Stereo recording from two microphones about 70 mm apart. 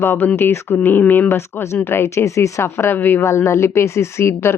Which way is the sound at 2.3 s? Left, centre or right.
Left.